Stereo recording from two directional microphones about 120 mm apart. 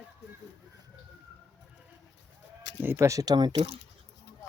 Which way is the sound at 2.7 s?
20° right (ahead or behind).